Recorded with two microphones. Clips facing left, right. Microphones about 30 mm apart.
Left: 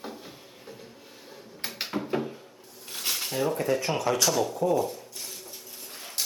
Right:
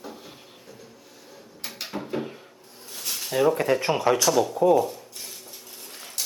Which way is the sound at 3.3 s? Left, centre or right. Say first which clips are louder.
Right 8 dB; centre.